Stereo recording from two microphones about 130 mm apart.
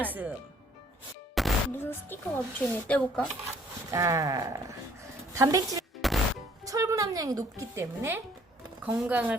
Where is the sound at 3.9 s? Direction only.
25° right (ahead or behind).